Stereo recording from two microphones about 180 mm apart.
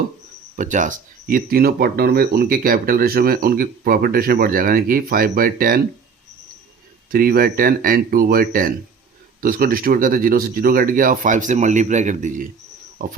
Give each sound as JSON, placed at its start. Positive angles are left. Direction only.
{"t": 0.5, "sound": "speech", "side_deg": -45}
{"t": 7.1, "sound": "speech", "side_deg": -55}